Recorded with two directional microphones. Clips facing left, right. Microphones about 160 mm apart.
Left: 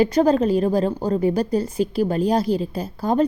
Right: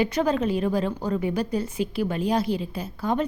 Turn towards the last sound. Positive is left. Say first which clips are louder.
# left 6 dB
turn(degrees=35)  # may be behind; listen again after turning